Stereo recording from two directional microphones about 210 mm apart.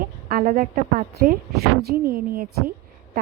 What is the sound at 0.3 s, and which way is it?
A woman's voice, 40° right (ahead or behind).